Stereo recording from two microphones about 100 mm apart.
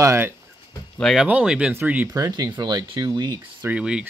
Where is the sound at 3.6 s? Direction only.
10° right (ahead or behind).